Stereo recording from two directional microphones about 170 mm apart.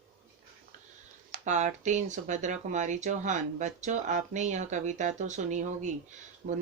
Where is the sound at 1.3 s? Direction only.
45° right (ahead or behind).